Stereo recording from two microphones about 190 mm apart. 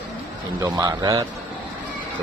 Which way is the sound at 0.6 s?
20° right (ahead or behind).